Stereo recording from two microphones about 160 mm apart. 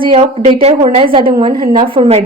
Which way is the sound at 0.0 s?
35° right (ahead or behind).